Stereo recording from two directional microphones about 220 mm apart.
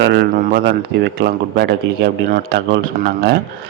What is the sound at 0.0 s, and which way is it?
A man's voice, 50° right (ahead or behind).